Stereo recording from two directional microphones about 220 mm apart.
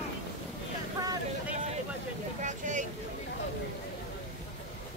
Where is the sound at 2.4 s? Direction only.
35° right (ahead or behind).